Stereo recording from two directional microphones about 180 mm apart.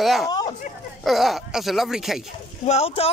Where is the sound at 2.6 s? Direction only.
35° left (ahead or behind).